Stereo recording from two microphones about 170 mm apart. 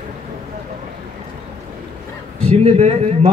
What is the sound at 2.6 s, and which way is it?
Speech, 40° right (ahead or behind).